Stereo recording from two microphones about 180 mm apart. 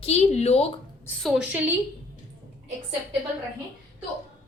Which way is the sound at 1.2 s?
5° right (ahead or behind).